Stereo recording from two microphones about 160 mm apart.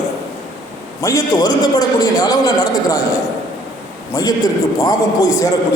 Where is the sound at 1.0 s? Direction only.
20° left (ahead or behind).